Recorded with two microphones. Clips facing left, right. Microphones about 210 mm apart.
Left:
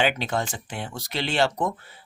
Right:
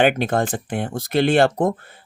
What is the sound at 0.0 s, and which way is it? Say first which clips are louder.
Speech: right 7 dB; 50° right (ahead or behind).